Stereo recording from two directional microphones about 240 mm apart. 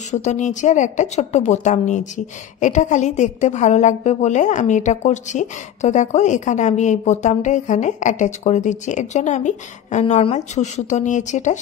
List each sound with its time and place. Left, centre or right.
0.1 s a woman's voice: left